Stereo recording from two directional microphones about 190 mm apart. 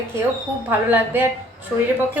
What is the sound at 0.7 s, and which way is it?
Speech, 10° right (ahead or behind).